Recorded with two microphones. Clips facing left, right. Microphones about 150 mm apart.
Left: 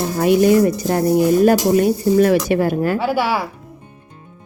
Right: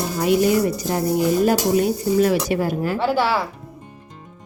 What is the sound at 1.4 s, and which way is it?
Speech, 55° left (ahead or behind).